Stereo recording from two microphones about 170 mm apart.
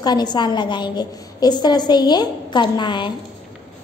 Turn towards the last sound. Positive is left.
turn(degrees=25)  # may be behind; listen again after turning